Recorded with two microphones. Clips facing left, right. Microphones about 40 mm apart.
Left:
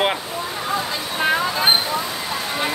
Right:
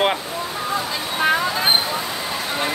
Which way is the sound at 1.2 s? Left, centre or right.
Centre.